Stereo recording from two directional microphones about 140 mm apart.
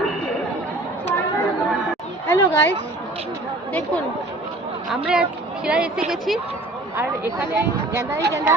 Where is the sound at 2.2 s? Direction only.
20° left (ahead or behind).